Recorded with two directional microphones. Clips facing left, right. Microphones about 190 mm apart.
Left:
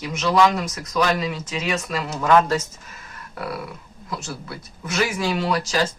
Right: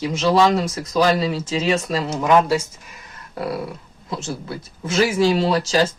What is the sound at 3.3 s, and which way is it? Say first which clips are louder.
Speech: right 5 dB; 30° right (ahead or behind).